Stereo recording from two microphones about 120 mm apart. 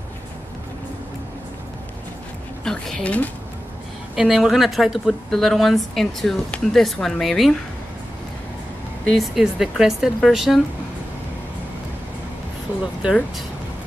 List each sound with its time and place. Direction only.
2.6 s a woman's voice: 5° left (ahead or behind)
4.1 s a woman's voice: 5° right (ahead or behind)
9.1 s a woman's voice: centre (ahead or behind)